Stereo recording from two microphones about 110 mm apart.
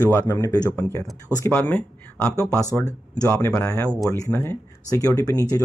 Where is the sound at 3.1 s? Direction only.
25° left (ahead or behind).